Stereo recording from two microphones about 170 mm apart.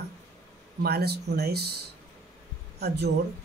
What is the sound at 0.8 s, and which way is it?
Speech, 70° right (ahead or behind).